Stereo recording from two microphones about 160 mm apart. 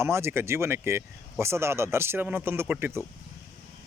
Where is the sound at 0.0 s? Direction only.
15° right (ahead or behind).